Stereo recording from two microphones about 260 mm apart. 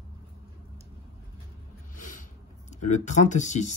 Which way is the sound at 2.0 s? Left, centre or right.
Left.